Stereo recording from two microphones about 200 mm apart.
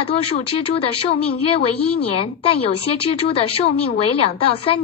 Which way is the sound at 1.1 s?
30° left (ahead or behind).